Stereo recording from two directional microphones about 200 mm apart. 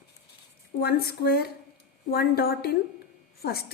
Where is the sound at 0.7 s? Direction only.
50° left (ahead or behind).